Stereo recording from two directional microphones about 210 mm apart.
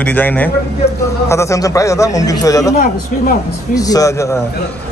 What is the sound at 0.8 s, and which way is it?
Speech, 50° left (ahead or behind).